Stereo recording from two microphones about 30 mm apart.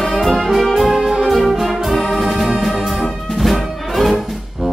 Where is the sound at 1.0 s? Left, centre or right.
Right.